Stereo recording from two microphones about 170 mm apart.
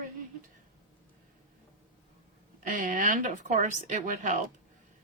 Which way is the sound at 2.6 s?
55° right (ahead or behind).